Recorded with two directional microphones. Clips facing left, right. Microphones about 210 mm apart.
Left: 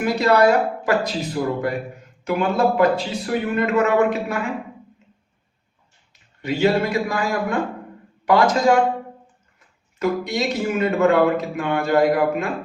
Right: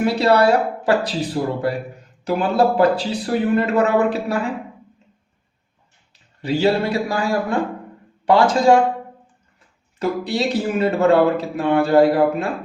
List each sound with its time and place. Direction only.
0.0 s speech: 30° right (ahead or behind)
6.4 s speech: 30° right (ahead or behind)
10.0 s speech: 30° right (ahead or behind)